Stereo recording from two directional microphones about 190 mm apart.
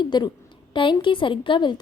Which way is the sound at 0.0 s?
25° left (ahead or behind).